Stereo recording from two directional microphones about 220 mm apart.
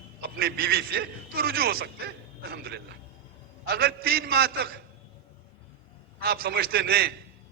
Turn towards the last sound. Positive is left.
turn(degrees=-45)  # may be behind; listen again after turning